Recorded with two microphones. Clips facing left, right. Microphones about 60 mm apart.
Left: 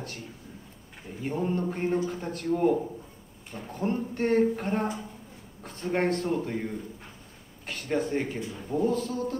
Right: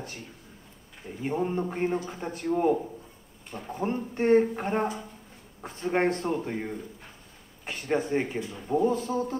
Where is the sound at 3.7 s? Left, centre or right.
Centre.